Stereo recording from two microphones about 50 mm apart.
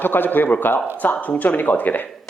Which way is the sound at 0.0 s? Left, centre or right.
Left.